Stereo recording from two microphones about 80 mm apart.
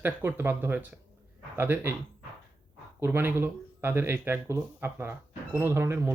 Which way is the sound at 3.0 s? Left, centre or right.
Right.